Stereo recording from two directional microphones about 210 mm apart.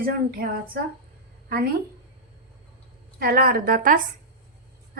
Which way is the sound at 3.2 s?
45° right (ahead or behind).